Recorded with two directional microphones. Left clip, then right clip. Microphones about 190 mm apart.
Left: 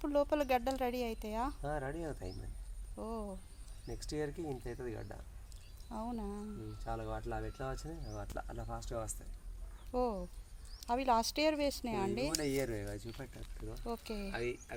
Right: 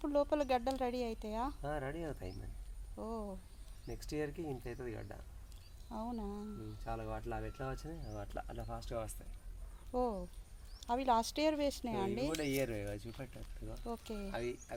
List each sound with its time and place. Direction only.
0.0 s speech: 5° right (ahead or behind)
1.6 s speech: 10° right (ahead or behind)
2.9 s speech: centre (ahead or behind)
3.8 s speech: 15° right (ahead or behind)
5.9 s speech: centre (ahead or behind)
6.8 s speech: 15° right (ahead or behind)
9.9 s speech: centre (ahead or behind)
12.3 s speech: 45° right (ahead or behind)